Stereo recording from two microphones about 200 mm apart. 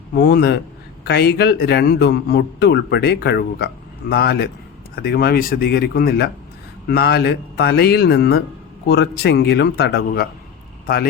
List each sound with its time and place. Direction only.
0.1 s a man's voice: 55° left (ahead or behind)